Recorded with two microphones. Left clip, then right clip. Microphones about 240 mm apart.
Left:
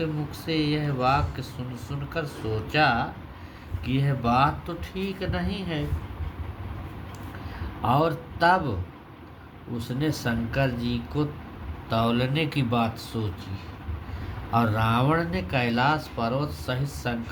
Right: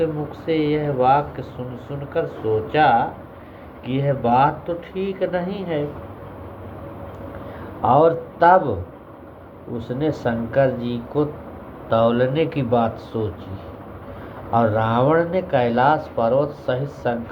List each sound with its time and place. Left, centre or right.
0.0 s speech: left
7.8 s speech: left
9.7 s speech: left
14.5 s speech: left